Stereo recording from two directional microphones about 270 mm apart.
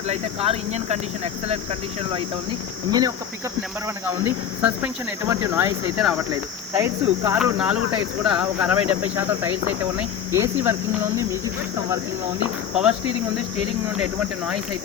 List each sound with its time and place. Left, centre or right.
0.1 s speech: right
4.0 s cricket: centre
8.2 s speech: centre
10.3 s cricket: centre
12.7 s speech: centre